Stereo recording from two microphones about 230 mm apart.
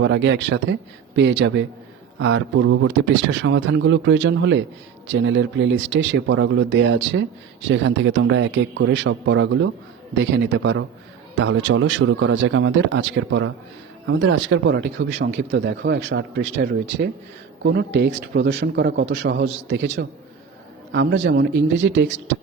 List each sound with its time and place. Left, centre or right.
0.0 s a man's voice: right